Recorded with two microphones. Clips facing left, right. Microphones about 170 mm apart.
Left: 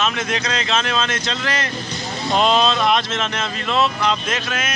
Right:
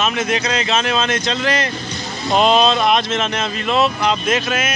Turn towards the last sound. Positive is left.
turn(degrees=-10)  # may be behind; listen again after turning